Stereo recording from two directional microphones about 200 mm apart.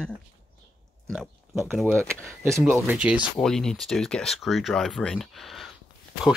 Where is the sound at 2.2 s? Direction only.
10° right (ahead or behind).